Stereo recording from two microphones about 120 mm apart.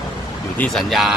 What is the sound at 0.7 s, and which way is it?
Speech, centre (ahead or behind).